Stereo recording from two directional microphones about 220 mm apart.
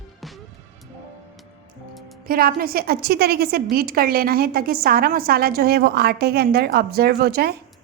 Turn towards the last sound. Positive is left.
turn(degrees=-45)  # may be behind; listen again after turning